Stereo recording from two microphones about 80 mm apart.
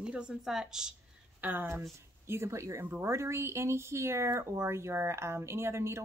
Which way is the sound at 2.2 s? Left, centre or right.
Right.